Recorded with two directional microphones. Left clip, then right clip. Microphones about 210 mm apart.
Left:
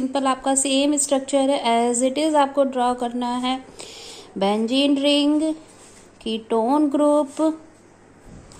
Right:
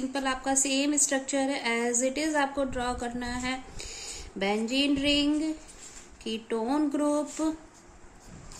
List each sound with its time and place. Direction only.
0.1 s a woman's voice: 20° left (ahead or behind)
1.9 s a woman's voice: 90° left
2.1 s a woman's voice: 20° left (ahead or behind)
6.4 s a sound: 15° left (ahead or behind)